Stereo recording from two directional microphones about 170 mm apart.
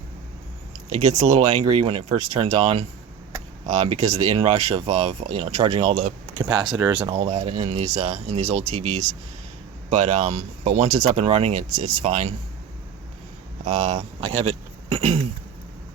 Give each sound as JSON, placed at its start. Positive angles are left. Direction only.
{"t": 1.0, "sound": "speech", "side_deg": -40}
{"t": 6.4, "sound": "speech", "side_deg": -25}
{"t": 6.7, "sound": "speech", "side_deg": -15}
{"t": 7.1, "sound": "speech", "side_deg": -40}
{"t": 13.7, "sound": "speech", "side_deg": -45}